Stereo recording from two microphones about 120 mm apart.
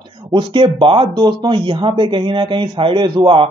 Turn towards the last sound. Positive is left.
turn(degrees=-45)  # may be behind; listen again after turning